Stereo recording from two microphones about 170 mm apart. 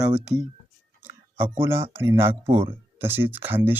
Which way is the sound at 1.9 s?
15° right (ahead or behind).